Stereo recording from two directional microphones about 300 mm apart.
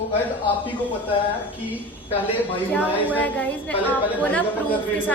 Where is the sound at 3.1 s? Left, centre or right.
Centre.